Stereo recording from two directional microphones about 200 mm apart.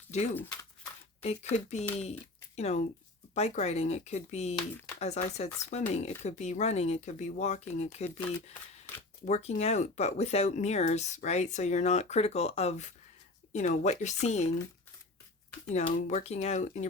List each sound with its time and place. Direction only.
0.1 s speech: 35° left (ahead or behind)
15.7 s speech: 35° left (ahead or behind)